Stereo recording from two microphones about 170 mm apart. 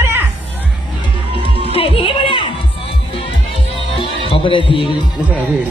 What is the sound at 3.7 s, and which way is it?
Music, 30° left (ahead or behind).